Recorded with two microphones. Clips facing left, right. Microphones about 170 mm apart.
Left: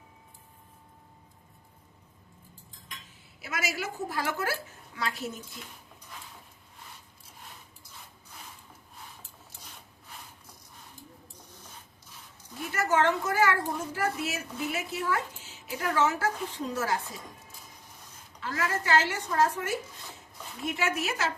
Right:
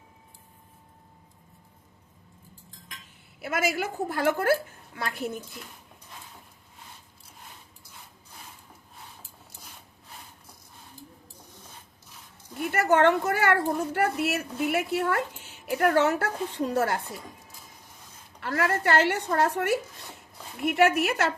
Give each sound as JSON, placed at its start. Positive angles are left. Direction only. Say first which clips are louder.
{"t": 3.4, "sound": "a woman's voice", "louder": "right 6 dB", "side_deg": -55}
{"t": 12.6, "sound": "a woman's voice", "louder": "right 5 dB", "side_deg": -65}
{"t": 18.3, "sound": "a woman's voice", "louder": "right 5 dB", "side_deg": -60}